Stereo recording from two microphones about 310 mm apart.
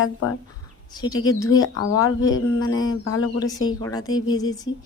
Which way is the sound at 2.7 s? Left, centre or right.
Left.